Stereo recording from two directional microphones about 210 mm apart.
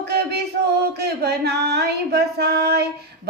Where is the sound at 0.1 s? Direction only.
50° right (ahead or behind).